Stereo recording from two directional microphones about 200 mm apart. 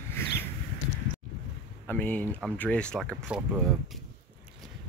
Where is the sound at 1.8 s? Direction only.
10° left (ahead or behind).